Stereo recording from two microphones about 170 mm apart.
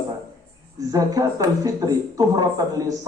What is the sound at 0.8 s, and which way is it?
Speech, 20° right (ahead or behind).